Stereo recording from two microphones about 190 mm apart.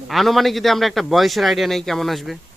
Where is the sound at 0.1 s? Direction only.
Centre (ahead or behind).